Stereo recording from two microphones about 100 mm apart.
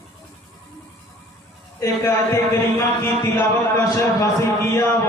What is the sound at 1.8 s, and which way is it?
Speech, 30° left (ahead or behind).